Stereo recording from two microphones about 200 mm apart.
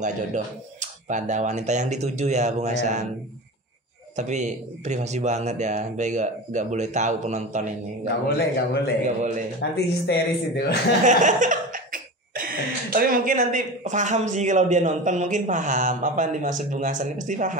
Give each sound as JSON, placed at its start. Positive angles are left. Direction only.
{"t": 0.0, "sound": "laughter", "side_deg": -35}
{"t": 4.2, "sound": "laughter", "side_deg": -35}
{"t": 8.3, "sound": "a man's voice", "side_deg": 55}
{"t": 9.0, "sound": "laughter", "side_deg": -35}
{"t": 9.6, "sound": "speech", "side_deg": 55}
{"t": 11.1, "sound": "laughter", "side_deg": -40}